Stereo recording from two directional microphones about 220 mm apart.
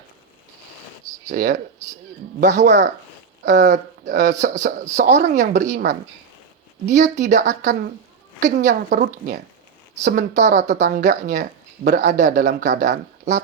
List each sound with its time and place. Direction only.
1.3 s speech: 35° right (ahead or behind)
2.6 s speech: 35° right (ahead or behind)